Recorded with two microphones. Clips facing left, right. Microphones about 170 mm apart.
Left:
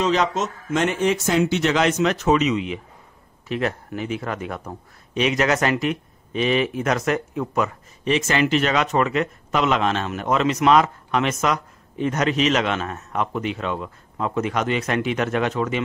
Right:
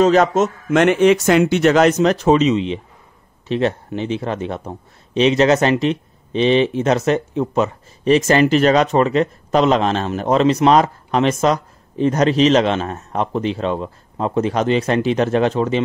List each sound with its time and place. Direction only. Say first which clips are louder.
0.0 s a man's voice: right 8 dB; 50° right (ahead or behind); by 15.8 s 30° right (ahead or behind)